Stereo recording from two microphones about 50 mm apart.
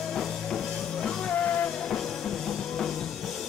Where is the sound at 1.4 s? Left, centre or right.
Left.